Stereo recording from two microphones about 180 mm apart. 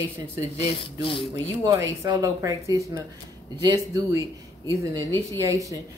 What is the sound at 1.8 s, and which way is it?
A woman's voice, 20° right (ahead or behind).